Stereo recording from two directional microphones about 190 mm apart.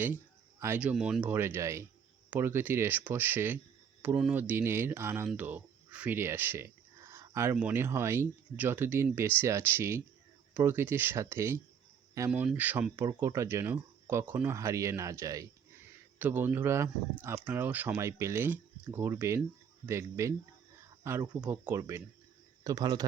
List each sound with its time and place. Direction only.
0.6 s speech: 10° right (ahead or behind)